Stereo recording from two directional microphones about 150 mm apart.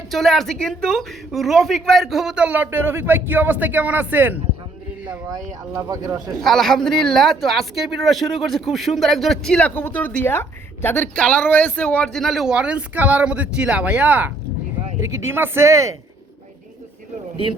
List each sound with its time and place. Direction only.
0.1 s speech: centre (ahead or behind)
5.7 s speech: 25° right (ahead or behind)
6.3 s speech: centre (ahead or behind); by 16.0 s 20° right (ahead or behind)